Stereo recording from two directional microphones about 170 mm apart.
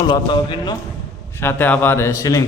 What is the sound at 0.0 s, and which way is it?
Speech, 25° left (ahead or behind).